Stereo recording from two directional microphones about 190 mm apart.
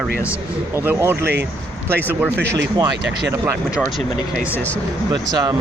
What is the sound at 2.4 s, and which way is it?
Speech, 65° right (ahead or behind).